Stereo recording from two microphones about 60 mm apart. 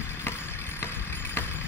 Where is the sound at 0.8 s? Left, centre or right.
Left.